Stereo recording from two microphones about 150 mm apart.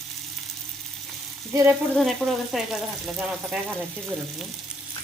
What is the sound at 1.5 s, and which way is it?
Frying, 15° right (ahead or behind).